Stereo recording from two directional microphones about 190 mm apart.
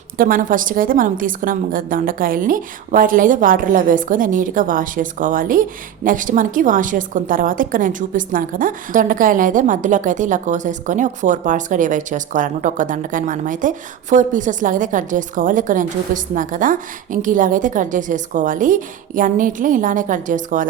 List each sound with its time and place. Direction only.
0.2 s a woman's voice: 45° right (ahead or behind)